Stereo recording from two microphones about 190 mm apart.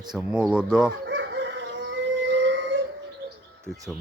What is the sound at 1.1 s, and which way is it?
Chicken, 70° right (ahead or behind).